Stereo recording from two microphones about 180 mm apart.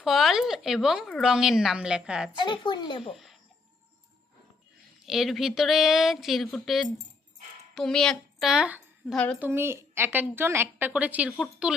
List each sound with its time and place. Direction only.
0.0 s speech: centre (ahead or behind)
2.3 s speech: 25° left (ahead or behind)
5.0 s a woman's voice: centre (ahead or behind)
9.1 s speech: 5° left (ahead or behind)
9.4 s a woman's voice: 15° right (ahead or behind); by 11.7 s 5° left (ahead or behind)